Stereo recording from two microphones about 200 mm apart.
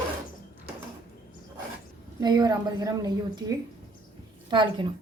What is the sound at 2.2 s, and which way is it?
A woman's voice, 20° right (ahead or behind).